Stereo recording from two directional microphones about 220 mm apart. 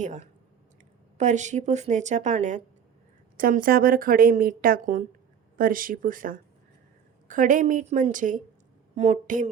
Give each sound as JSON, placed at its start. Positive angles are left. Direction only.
{"t": 0.0, "sound": "a woman's voice", "side_deg": -35}